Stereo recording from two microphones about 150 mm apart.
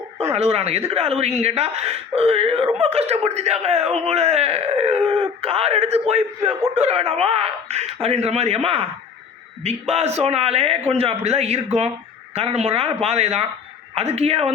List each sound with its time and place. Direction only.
0.3 s a man's voice: 45° right (ahead or behind)